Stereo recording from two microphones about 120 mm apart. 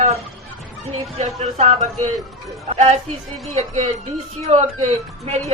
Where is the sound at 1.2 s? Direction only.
65° right (ahead or behind).